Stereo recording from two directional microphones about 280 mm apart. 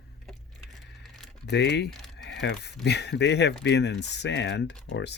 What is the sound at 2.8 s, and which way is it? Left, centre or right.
Speech, left.